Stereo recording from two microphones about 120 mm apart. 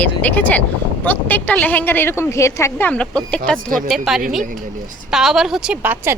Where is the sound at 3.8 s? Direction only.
5° right (ahead or behind).